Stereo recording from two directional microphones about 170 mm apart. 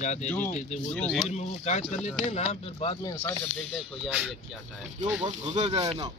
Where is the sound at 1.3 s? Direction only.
40° left (ahead or behind); by 3.2 s 25° left (ahead or behind).